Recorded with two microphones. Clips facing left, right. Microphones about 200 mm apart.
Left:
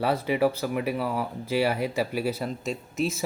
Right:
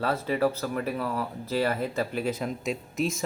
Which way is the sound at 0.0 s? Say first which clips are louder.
Left 2 dB; 15° left (ahead or behind).